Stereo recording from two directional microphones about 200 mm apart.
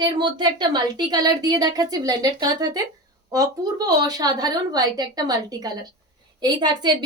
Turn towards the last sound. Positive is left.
turn(degrees=-20)  # may be behind; listen again after turning